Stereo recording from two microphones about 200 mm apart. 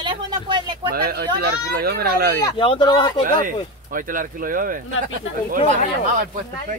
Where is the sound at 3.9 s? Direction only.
45° right (ahead or behind).